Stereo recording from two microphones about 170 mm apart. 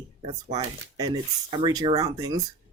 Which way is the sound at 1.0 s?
25° right (ahead or behind).